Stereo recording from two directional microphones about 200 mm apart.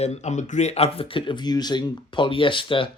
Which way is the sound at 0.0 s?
35° left (ahead or behind).